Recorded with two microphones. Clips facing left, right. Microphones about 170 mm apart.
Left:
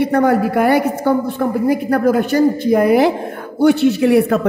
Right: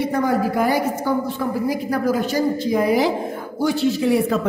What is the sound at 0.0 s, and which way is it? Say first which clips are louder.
A woman's voice: left 6 dB; 65° left (ahead or behind).